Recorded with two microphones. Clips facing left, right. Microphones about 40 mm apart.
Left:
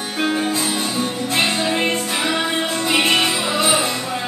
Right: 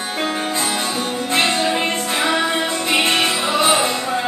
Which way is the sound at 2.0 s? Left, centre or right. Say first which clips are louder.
Right 2 dB; centre.